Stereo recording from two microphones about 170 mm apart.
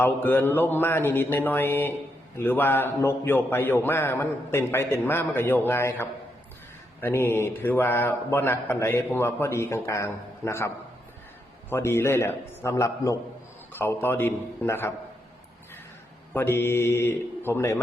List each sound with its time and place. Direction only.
0.0 s a man's voice: 10° left (ahead or behind)
11.7 s a man's voice: 15° left (ahead or behind)
16.3 s a man's voice: 15° left (ahead or behind)